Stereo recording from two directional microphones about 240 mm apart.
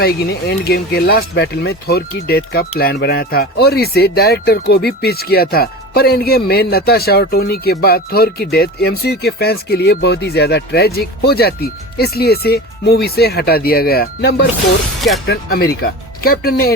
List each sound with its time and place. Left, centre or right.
0.0 s speech: left